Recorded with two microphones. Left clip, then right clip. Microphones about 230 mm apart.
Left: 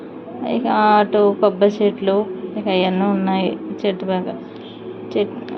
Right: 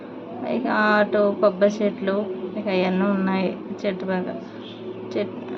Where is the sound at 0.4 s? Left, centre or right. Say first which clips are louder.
Left 5 dB; centre.